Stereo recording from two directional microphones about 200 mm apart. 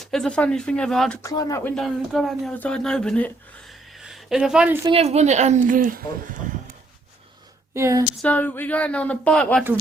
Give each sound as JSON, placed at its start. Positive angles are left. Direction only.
{"t": 0.0, "sound": "speech", "side_deg": 0}
{"t": 1.2, "sound": "speech", "side_deg": 20}
{"t": 1.7, "sound": "speech", "side_deg": 0}
{"t": 4.9, "sound": "a woman's voice", "side_deg": -30}
{"t": 7.7, "sound": "a sound", "side_deg": -15}
{"t": 8.2, "sound": "speech", "side_deg": 10}